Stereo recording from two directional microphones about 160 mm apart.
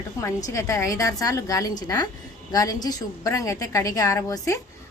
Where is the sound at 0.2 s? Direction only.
20° left (ahead or behind).